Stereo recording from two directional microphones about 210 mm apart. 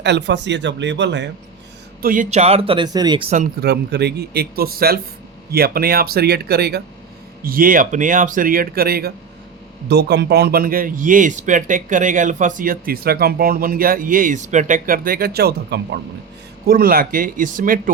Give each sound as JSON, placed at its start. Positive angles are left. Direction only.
{"t": 0.0, "sound": "speech", "side_deg": -55}
{"t": 2.0, "sound": "a man's voice", "side_deg": -40}
{"t": 3.6, "sound": "a man's voice", "side_deg": -50}